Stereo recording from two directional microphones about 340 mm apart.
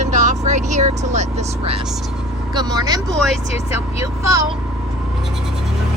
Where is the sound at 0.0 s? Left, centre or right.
Right.